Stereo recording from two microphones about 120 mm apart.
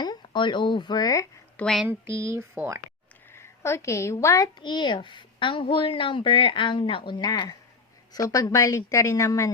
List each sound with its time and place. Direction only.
0.0 s speech: 40° left (ahead or behind)
1.5 s speech: 5° left (ahead or behind)
1.9 s speech: 20° right (ahead or behind)
3.3 s a woman's voice: 20° left (ahead or behind)
4.6 s a woman's voice: 40° left (ahead or behind)